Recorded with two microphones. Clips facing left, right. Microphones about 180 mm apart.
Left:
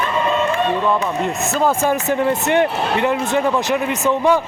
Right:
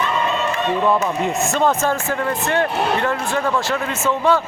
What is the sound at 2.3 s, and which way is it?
Speech, 20° left (ahead or behind).